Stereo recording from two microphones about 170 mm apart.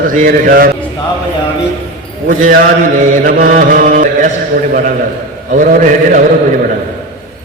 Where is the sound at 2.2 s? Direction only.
55° right (ahead or behind).